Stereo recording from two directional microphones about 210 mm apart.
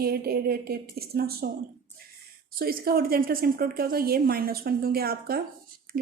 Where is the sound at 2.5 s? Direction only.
45° right (ahead or behind).